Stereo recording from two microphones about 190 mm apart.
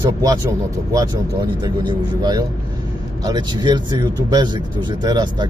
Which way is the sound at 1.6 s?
20° right (ahead or behind).